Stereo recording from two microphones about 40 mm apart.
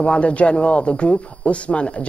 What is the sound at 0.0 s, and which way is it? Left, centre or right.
A man's voice, left.